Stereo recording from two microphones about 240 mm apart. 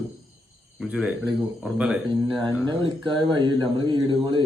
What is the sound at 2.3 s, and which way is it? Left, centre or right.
Speech, centre.